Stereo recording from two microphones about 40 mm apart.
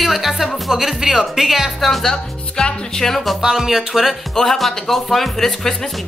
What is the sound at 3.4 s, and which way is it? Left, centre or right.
Speech, centre.